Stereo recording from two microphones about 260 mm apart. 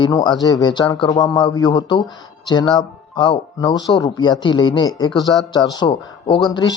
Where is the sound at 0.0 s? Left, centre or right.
Centre.